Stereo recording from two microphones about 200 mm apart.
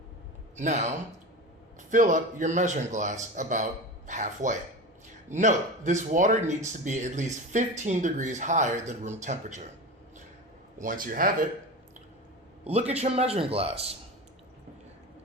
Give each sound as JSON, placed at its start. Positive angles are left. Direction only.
{"t": 0.5, "sound": "speech", "side_deg": -35}
{"t": 10.8, "sound": "speech", "side_deg": -45}
{"t": 12.9, "sound": "speech", "side_deg": -30}